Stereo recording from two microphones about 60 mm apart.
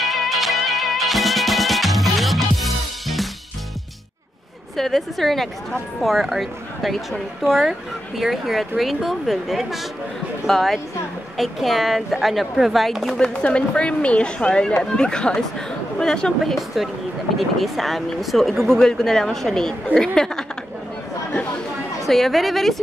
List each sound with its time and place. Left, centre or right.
0.0 s music: centre
4.7 s speech: centre
13.4 s a woman's voice: centre
16.5 s speech: centre
22.0 s speech: centre